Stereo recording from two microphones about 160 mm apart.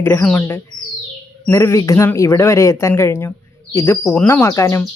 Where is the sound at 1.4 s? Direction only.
15° left (ahead or behind).